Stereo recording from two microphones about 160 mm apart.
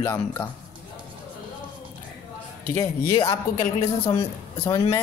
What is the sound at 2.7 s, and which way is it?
Speech, 20° left (ahead or behind).